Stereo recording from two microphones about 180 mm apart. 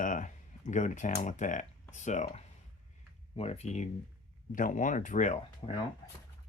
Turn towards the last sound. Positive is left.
turn(degrees=40)  # may be behind; listen again after turning